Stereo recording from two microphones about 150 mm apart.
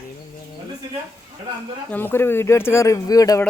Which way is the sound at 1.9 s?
15° left (ahead or behind).